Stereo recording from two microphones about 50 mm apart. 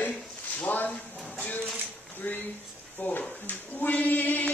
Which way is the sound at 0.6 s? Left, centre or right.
Left.